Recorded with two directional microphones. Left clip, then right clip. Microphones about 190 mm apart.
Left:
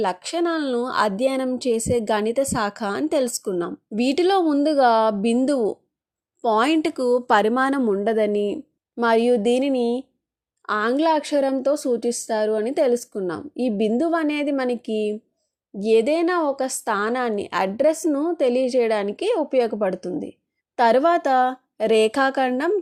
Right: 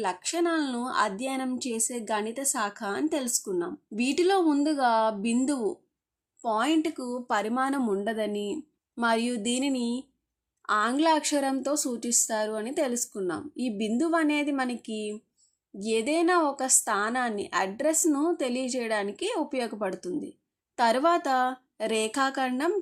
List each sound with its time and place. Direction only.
0.0 s a woman's voice: 30° left (ahead or behind)
7.8 s a woman's voice: 25° left (ahead or behind)